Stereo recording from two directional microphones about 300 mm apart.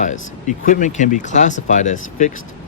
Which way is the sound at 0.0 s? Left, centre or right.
Left.